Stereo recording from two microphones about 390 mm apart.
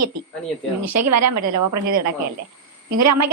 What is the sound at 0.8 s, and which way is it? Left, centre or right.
A woman's voice, right.